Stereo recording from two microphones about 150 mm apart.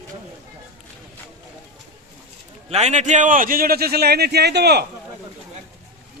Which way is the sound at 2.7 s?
45° right (ahead or behind).